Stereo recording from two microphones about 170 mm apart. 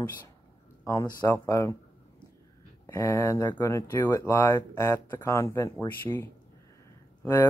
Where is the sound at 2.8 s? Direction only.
20° left (ahead or behind).